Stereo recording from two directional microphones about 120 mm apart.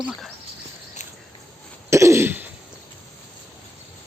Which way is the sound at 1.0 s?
80° left.